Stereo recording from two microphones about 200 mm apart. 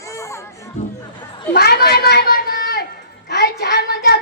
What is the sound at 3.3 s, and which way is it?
Child singing, 55° left (ahead or behind).